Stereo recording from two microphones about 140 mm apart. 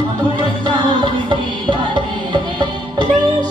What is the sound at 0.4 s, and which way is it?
Music, 35° right (ahead or behind).